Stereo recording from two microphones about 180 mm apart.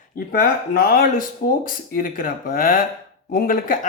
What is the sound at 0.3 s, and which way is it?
Speech, 55° left (ahead or behind).